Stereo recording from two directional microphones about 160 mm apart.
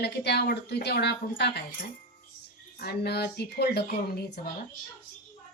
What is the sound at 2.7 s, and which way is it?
A woman's voice, 85° left.